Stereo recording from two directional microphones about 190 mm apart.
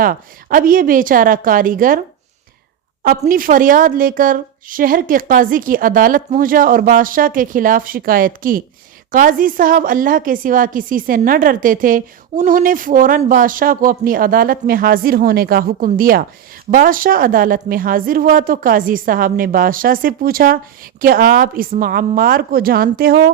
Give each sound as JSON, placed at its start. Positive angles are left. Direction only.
{"t": 0.0, "sound": "a woman's voice", "side_deg": -50}
{"t": 3.0, "sound": "a woman's voice", "side_deg": -50}